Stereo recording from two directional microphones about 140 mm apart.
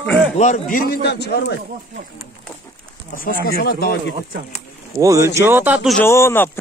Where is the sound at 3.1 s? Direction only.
90° left.